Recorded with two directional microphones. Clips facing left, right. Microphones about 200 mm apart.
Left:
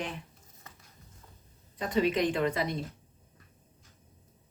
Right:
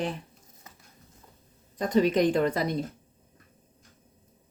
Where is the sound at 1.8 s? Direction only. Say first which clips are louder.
Right 5 dB; 40° right (ahead or behind).